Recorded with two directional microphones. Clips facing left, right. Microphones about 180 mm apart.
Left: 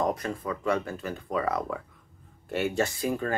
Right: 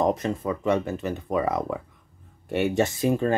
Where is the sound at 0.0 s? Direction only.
20° right (ahead or behind).